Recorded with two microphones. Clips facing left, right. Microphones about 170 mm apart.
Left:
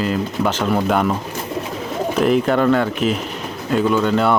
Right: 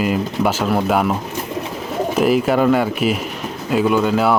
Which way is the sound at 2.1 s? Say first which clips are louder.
Right 1 dB; 5° right (ahead or behind).